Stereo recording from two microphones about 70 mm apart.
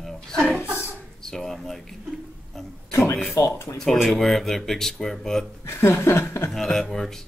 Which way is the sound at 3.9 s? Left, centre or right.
Centre.